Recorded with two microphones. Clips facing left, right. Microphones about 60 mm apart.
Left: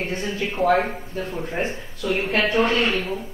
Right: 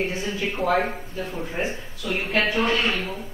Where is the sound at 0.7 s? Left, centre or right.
Left.